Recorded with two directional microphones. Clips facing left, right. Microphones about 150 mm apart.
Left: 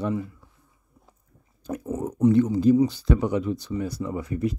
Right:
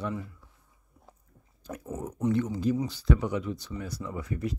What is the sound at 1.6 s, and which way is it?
Speech, 20° left (ahead or behind).